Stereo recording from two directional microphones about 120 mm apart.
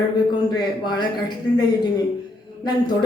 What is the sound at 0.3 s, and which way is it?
Speech, 35° left (ahead or behind).